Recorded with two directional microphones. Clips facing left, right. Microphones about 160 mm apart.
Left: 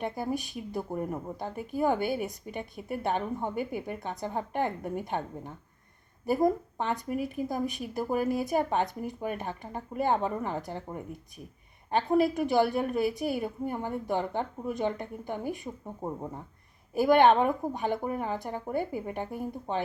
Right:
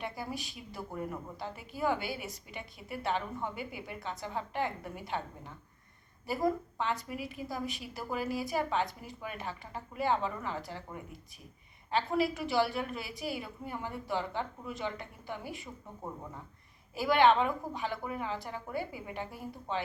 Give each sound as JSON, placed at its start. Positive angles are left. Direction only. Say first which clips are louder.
{"t": 0.0, "sound": "a woman's voice", "louder": "left 7 dB", "side_deg": 50}
{"t": 7.0, "sound": "a woman's voice", "louder": "left 8 dB", "side_deg": 50}
{"t": 11.9, "sound": "a woman's voice", "louder": "left 5 dB", "side_deg": 50}
{"t": 16.0, "sound": "speech", "louder": "left 6 dB", "side_deg": 30}
{"t": 16.9, "sound": "a woman's voice", "louder": "left 5 dB", "side_deg": 50}